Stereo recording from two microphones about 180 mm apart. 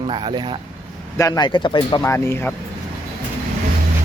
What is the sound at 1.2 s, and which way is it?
Speech, 20° left (ahead or behind).